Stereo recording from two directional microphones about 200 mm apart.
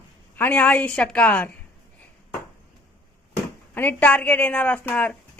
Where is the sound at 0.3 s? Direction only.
10° left (ahead or behind).